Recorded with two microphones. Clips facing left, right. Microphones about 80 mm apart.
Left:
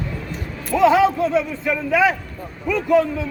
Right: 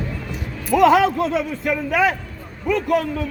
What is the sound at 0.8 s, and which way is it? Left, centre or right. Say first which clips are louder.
Speech: even; right.